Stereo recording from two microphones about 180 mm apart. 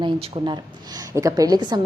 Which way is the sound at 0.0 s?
25° right (ahead or behind).